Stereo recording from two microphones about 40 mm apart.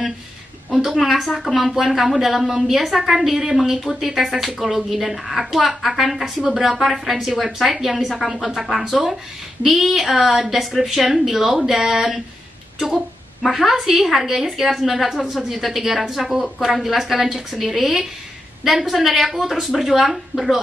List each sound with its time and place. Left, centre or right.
0.9 s a woman's voice: centre
4.6 s a woman's voice: centre